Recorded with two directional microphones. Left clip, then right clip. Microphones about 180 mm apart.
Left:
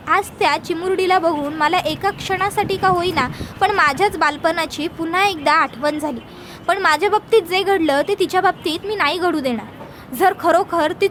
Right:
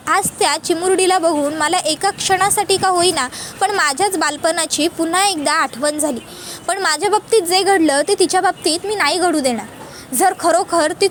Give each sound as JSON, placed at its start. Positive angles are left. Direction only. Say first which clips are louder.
{"t": 0.0, "sound": "a woman's voice", "louder": "right 1 dB", "side_deg": -20}